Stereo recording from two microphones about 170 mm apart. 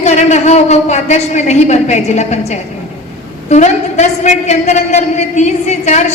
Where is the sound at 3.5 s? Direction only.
40° left (ahead or behind).